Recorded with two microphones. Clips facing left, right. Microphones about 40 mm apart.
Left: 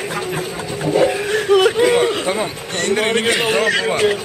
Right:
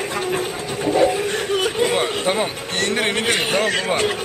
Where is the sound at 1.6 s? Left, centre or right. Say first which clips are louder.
Left 10 dB; left.